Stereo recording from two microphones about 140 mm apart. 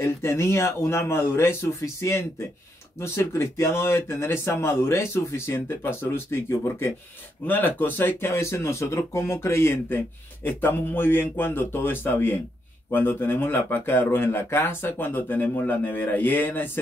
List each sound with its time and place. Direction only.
0.0 s speech: 20° left (ahead or behind)